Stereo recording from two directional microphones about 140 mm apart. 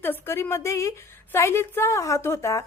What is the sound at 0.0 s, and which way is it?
A woman's voice, 15° left (ahead or behind).